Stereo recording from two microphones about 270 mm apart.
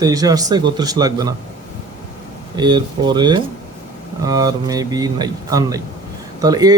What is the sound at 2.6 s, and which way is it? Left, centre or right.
A man's voice, centre.